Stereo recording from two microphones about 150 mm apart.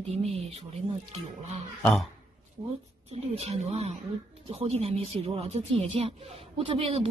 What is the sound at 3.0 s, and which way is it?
Speech, 45° right (ahead or behind).